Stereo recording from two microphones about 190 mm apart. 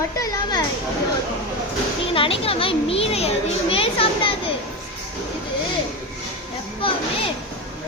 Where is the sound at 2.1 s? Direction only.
30° left (ahead or behind).